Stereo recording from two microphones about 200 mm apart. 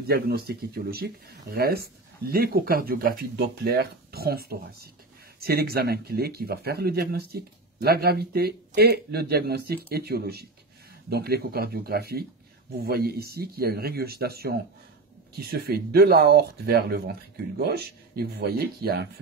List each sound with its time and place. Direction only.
0.0 s speech: 50° right (ahead or behind)